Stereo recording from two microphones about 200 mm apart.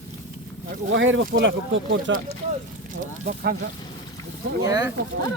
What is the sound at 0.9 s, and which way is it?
Speech, 70° right (ahead or behind).